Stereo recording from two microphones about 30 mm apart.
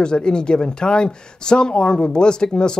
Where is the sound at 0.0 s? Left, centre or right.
Left.